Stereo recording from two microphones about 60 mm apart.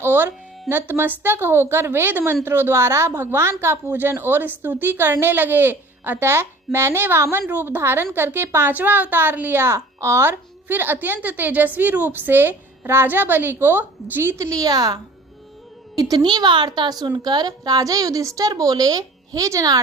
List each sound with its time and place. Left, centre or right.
0.0 s a woman's voice: right
10.2 s a woman's voice: right
14.3 s a woman's voice: right
17.6 s a woman's voice: right